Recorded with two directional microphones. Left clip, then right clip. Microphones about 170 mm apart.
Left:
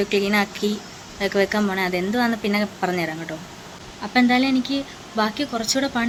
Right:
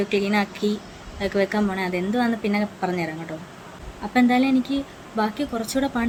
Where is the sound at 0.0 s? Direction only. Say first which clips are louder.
Left 2 dB; 5° right (ahead or behind).